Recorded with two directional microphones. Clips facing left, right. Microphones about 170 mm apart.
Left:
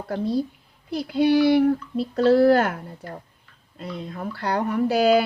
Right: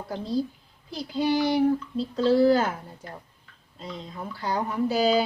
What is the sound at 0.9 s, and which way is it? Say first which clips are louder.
Speech: left 6 dB; 65° left (ahead or behind).